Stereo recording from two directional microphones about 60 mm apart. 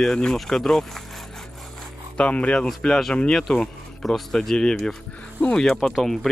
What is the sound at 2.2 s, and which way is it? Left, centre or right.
Speech, left.